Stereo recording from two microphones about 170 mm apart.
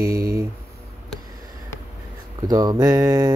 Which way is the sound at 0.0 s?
60° right (ahead or behind).